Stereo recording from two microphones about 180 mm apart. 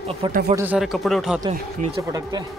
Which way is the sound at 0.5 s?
10° right (ahead or behind).